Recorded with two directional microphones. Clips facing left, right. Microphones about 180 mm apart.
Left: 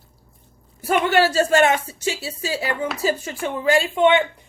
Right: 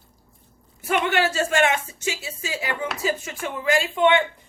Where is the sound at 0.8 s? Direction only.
35° left (ahead or behind).